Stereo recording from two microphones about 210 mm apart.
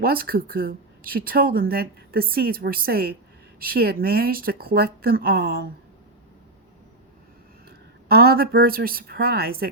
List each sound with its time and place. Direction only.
0.0 s speech: 45° right (ahead or behind)
8.0 s speech: 45° right (ahead or behind)